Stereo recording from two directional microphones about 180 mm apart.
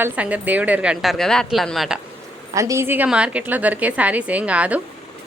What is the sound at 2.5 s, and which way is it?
A woman's voice, 15° right (ahead or behind).